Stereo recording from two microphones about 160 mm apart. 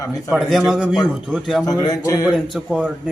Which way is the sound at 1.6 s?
25° left (ahead or behind).